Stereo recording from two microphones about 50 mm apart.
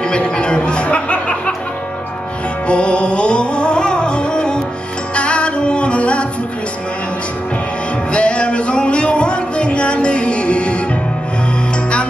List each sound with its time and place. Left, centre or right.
0.1 s music: centre
2.7 s music: left
8.1 s music: left